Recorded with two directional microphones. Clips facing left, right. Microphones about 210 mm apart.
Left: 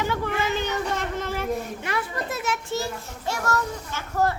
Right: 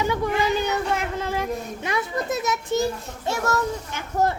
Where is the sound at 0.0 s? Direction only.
15° right (ahead or behind).